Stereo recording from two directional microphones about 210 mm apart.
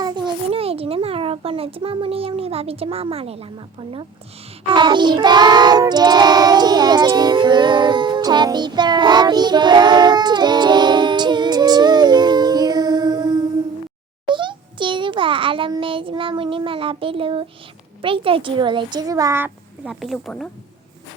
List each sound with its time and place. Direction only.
0.0 s a child's voice: 20° right (ahead or behind)
4.7 s child singing: 20° right (ahead or behind)
14.3 s a sound: 25° right (ahead or behind)
18.0 s a child's voice: 25° right (ahead or behind); by 20.5 s centre (ahead or behind)